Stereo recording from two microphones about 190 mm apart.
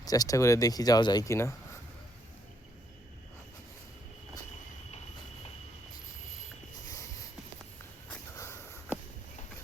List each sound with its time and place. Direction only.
0.0 s speech: 20° left (ahead or behind)